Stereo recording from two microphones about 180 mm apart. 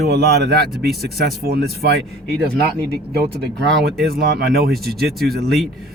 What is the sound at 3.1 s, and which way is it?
Speech, 60° right (ahead or behind).